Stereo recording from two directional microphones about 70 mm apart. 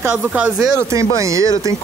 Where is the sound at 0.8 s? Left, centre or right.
Right.